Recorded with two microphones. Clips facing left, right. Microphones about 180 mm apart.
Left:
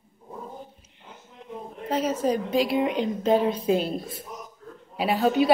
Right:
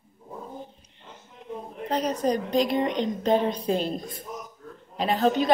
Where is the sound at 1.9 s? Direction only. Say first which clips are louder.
Left 1 dB; 5° left (ahead or behind).